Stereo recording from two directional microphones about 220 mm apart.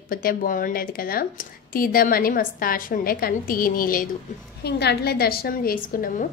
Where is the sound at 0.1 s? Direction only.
40° left (ahead or behind).